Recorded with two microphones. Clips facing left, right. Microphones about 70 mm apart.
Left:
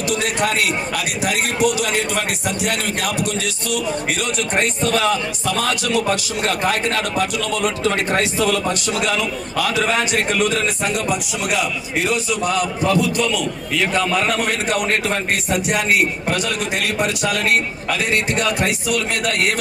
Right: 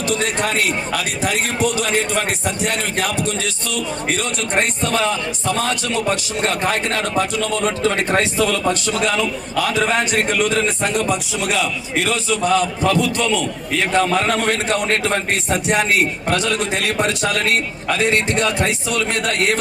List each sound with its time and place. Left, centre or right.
0.1 s speech: right
3.7 s a man's voice: right
16.3 s speech: right
18.0 s speech: right